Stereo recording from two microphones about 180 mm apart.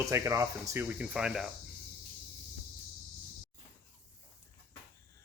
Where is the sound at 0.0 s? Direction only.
15° right (ahead or behind).